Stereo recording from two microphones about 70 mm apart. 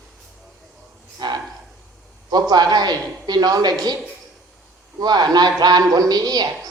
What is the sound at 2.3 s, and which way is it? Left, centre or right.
A man's voice, right.